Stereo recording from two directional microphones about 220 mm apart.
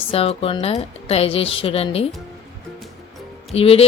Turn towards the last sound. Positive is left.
turn(degrees=25)  # may be behind; listen again after turning